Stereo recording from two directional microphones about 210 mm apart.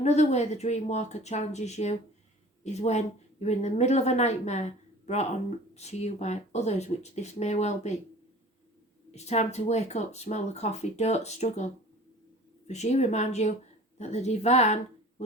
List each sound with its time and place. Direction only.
0.0 s speech: 30° left (ahead or behind)
9.1 s speech: 30° left (ahead or behind)